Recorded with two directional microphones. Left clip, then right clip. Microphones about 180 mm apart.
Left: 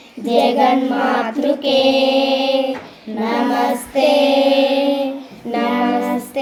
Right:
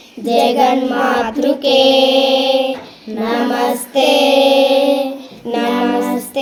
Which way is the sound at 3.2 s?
35° right (ahead or behind).